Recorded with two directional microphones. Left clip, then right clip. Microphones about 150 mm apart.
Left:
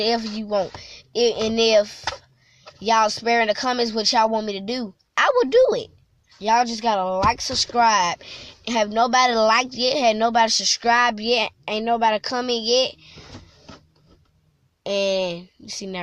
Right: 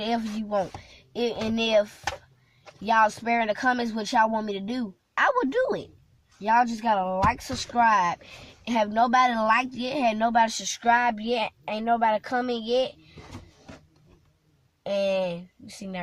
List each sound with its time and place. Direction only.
0.0 s speech: 15° left (ahead or behind)
14.8 s speech: 15° left (ahead or behind)